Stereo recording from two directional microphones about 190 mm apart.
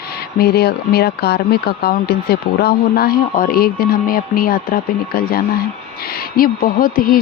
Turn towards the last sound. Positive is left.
turn(degrees=50)  # may be behind; listen again after turning